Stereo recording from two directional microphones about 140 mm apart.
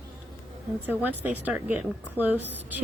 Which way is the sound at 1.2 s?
10° right (ahead or behind).